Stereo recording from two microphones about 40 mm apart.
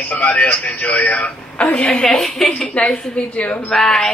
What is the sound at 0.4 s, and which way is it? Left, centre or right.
A man's voice, left.